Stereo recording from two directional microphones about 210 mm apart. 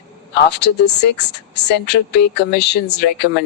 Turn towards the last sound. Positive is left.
turn(degrees=55)  # may be behind; listen again after turning